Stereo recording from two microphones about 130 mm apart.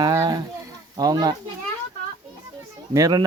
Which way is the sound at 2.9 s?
25° right (ahead or behind).